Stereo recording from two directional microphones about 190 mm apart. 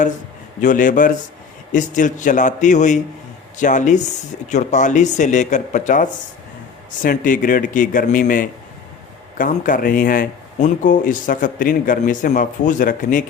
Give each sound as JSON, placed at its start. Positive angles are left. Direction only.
{"t": 0.6, "sound": "speech", "side_deg": 45}